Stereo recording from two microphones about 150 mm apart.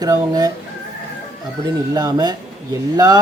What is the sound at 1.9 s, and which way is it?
Speech, 25° right (ahead or behind).